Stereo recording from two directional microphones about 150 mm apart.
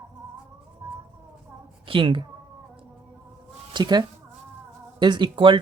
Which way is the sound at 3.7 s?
30° right (ahead or behind).